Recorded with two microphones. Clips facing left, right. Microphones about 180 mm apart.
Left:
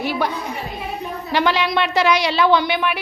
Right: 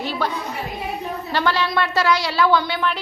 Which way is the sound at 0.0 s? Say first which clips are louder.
Left 3 dB; 10° left (ahead or behind).